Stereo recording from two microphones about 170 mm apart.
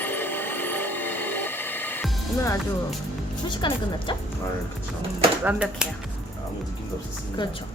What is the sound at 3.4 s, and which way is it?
Speech, 30° left (ahead or behind).